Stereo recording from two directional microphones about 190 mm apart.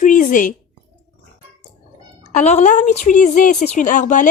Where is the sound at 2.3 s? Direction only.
40° left (ahead or behind).